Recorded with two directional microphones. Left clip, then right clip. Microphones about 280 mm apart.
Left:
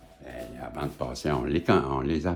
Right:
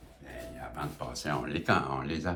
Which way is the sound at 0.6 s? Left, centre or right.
Left.